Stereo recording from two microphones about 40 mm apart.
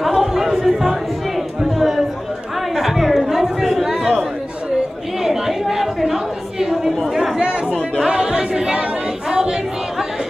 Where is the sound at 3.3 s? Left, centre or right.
Centre.